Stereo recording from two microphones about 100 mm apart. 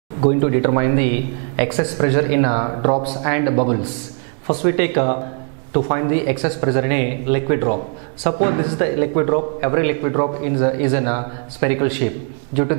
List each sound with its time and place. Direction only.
0.2 s speech: 15° right (ahead or behind)